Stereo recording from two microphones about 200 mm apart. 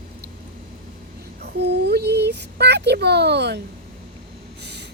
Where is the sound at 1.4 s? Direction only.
55° right (ahead or behind).